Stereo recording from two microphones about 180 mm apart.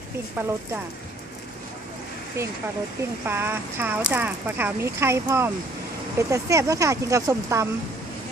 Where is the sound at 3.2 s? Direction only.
10° right (ahead or behind).